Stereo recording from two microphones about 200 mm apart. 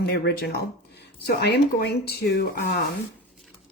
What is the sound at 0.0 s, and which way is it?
Speech, 55° left (ahead or behind).